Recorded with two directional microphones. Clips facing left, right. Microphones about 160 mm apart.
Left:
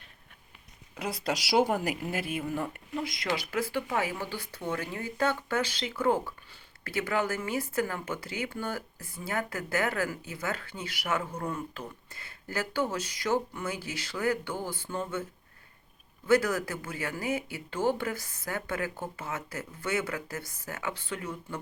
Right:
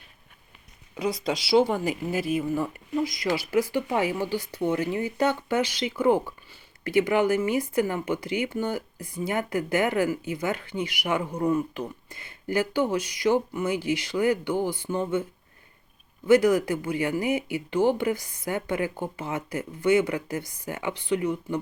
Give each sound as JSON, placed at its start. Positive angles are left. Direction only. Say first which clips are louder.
{"t": 0.9, "sound": "speech", "louder": "right 5 dB", "side_deg": 5}
{"t": 3.5, "sound": "speech", "louder": "right 7 dB", "side_deg": -10}
{"t": 16.2, "sound": "speech", "louder": "right 6 dB", "side_deg": -15}